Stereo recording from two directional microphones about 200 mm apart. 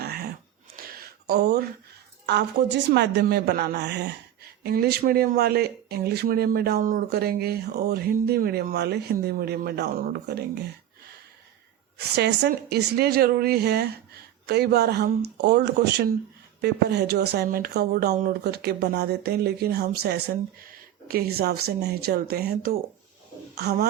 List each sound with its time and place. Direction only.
0.0 s a sound: 50° right (ahead or behind)
2.2 s a woman's voice: 55° right (ahead or behind)
11.9 s a woman's voice: 55° right (ahead or behind)
18.4 s a woman's voice: 55° right (ahead or behind)